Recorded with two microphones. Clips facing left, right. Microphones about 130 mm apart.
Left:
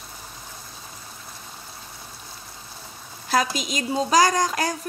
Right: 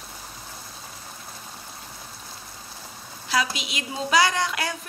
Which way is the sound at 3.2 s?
45° left (ahead or behind).